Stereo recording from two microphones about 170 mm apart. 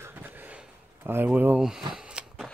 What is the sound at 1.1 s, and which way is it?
Speech, 10° right (ahead or behind).